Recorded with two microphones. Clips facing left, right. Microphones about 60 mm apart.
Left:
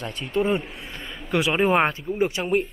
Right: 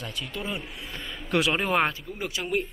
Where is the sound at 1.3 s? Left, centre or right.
Centre.